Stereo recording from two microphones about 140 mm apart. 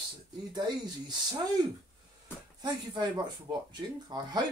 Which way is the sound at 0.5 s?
30° right (ahead or behind).